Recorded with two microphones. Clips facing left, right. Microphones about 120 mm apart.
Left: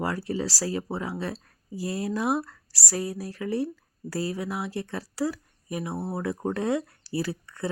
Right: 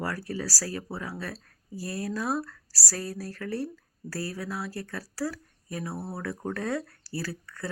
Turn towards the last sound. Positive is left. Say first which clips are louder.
# left 5 dB
turn(degrees=20)  # may be behind; listen again after turning